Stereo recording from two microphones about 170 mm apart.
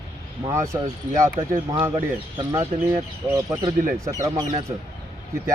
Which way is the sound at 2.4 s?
20° right (ahead or behind).